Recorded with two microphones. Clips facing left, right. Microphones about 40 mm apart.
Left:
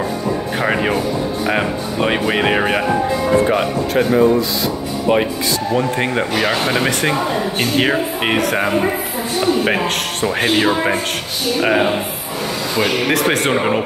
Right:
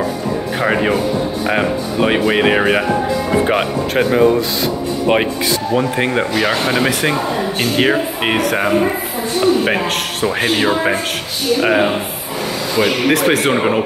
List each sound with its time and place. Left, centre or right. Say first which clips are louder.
0.6 s speech: right 3 dB; centre
3.4 s speech: even; right
5.7 s speech: right 1 dB; centre
10.2 s speech: even; centre